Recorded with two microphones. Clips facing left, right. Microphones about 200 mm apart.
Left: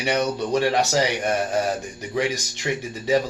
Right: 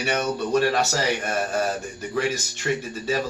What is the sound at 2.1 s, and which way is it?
Speech, 15° left (ahead or behind).